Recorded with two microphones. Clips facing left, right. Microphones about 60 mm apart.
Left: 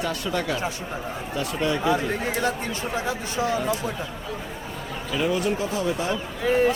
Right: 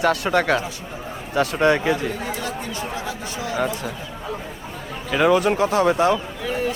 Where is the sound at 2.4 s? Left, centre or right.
Left.